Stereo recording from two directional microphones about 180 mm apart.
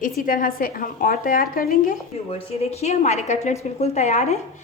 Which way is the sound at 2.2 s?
35° left (ahead or behind).